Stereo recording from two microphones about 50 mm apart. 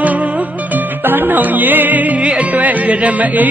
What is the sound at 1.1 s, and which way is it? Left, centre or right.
Music, right.